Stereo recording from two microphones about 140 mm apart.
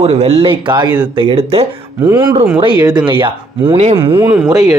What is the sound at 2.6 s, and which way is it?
Speech, 30° right (ahead or behind).